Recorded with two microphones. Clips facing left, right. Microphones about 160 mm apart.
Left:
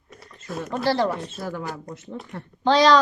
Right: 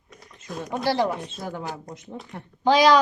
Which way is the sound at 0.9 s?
15° right (ahead or behind).